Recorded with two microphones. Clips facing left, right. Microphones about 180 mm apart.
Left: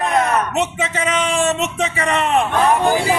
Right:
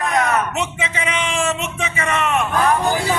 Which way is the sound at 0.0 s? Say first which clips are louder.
Left 2 dB; 30° left (ahead or behind).